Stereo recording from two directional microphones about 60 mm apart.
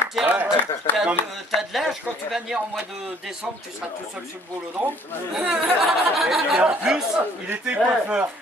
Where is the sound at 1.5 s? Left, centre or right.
Centre.